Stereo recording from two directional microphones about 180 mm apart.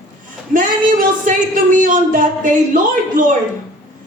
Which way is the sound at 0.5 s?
45° right (ahead or behind).